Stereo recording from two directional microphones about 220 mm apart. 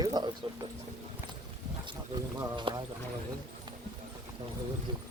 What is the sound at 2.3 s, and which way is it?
Speech, 20° right (ahead or behind).